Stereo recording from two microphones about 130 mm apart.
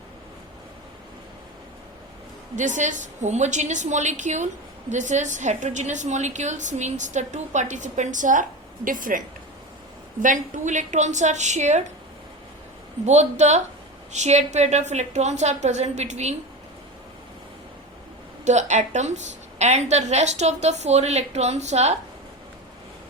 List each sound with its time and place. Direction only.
2.6 s a woman's voice: 70° right (ahead or behind)
13.1 s a woman's voice: 60° right (ahead or behind)
18.4 s a woman's voice: 65° right (ahead or behind)